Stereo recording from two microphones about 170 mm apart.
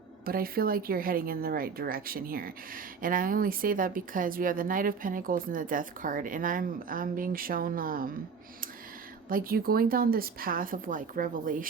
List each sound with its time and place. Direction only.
0.3 s speech: 60° right (ahead or behind)
9.3 s speech: 60° right (ahead or behind)